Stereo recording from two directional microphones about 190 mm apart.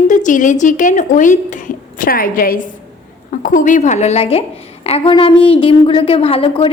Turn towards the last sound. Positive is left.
turn(degrees=30)  # may be behind; listen again after turning